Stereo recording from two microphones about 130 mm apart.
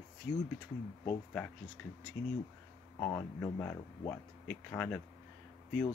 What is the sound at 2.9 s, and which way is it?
Speech, 15° left (ahead or behind).